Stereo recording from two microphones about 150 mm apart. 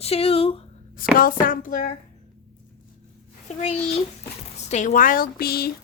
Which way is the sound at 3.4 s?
45° left (ahead or behind).